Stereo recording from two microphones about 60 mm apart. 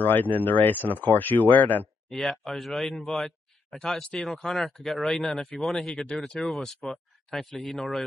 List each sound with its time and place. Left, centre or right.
0.0 s speech: left
2.0 s speech: centre
3.3 s speech: centre